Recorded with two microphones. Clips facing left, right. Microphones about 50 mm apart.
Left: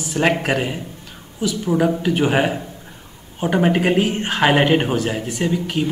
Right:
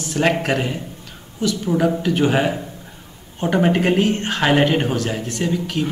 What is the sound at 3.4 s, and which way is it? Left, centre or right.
A man's voice, centre.